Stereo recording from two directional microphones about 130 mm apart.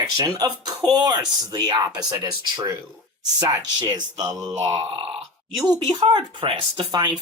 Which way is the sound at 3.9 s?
30° right (ahead or behind).